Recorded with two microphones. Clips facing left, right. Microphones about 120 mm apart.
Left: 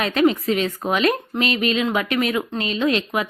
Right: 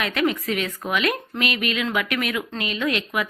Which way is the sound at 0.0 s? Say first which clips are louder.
Left 5 dB; 30° left (ahead or behind).